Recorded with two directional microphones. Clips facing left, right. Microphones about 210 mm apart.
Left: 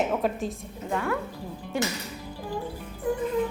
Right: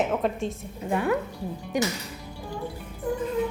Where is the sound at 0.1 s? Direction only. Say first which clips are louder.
Right 1 dB; centre (ahead or behind).